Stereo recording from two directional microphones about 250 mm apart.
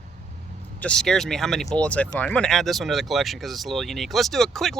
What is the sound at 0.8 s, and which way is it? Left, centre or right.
Speech, centre.